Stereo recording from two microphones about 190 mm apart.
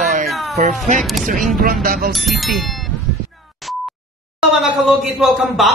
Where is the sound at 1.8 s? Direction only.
50° right (ahead or behind).